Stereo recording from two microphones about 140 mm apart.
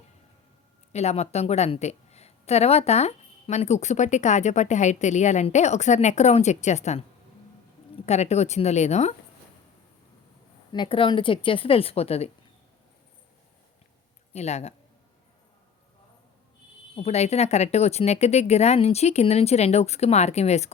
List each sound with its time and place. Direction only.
0.9 s a woman's voice: 50° left (ahead or behind)
8.0 s speech: 50° left (ahead or behind)
10.7 s a woman's voice: 35° left (ahead or behind)
14.3 s speech: 50° left (ahead or behind)
16.9 s speech: 50° left (ahead or behind)